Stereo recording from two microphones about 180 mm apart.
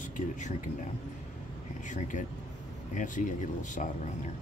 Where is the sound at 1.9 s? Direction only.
45° left (ahead or behind).